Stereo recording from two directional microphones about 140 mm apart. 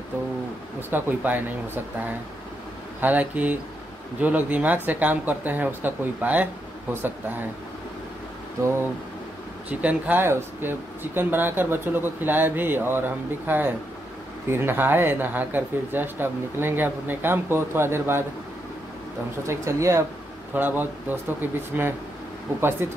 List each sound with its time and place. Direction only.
0.7 s speech: 15° right (ahead or behind)
3.0 s speech: 10° right (ahead or behind)
9.7 s speech: 10° right (ahead or behind)
19.4 s speech: 20° right (ahead or behind)